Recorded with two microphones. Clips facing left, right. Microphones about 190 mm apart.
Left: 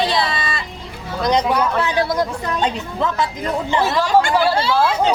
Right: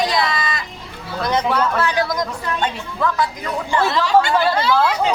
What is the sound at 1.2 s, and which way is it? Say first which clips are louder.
Speech: left 2 dB; 15° left (ahead or behind).